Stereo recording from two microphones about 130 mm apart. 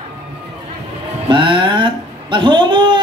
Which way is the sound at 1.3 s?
40° right (ahead or behind).